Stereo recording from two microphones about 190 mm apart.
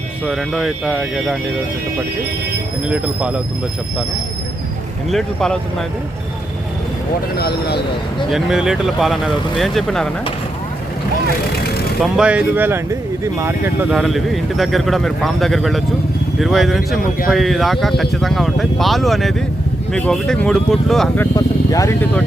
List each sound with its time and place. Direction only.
0.3 s speech: centre (ahead or behind)
2.9 s speech: 5° right (ahead or behind)
5.1 s speech: centre (ahead or behind)
7.3 s speech: 55° left (ahead or behind)
8.3 s speech: centre (ahead or behind)
12.1 s speech: 5° right (ahead or behind)
13.9 s speech: centre (ahead or behind)
21.3 s speech: 15° left (ahead or behind)